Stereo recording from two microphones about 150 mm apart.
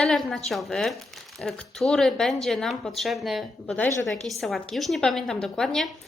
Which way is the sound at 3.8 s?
20° left (ahead or behind).